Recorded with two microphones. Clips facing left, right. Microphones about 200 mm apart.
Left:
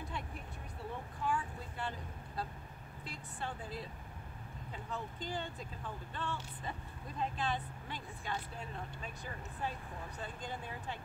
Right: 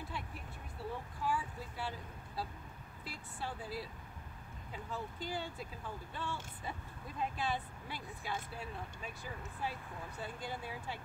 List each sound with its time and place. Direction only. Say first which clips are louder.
1.2 s vehicle: left 1 dB; 5° right (ahead or behind)
3.1 s speech: even; 5° right (ahead or behind)
4.9 s speech: even; 10° right (ahead or behind)